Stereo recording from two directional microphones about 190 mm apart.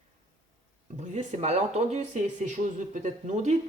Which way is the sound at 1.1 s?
35° right (ahead or behind).